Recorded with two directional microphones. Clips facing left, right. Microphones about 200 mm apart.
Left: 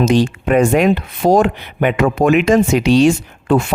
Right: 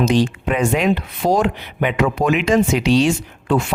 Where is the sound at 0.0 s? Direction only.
45° left (ahead or behind).